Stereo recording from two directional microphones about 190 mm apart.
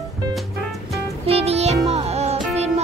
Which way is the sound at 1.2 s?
30° right (ahead or behind).